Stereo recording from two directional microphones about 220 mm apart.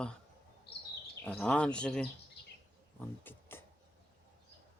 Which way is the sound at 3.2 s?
10° left (ahead or behind).